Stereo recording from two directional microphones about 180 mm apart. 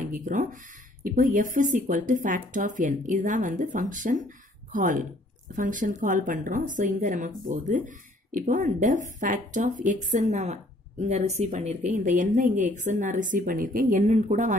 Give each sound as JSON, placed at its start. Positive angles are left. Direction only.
{"t": 0.2, "sound": "speech", "side_deg": -45}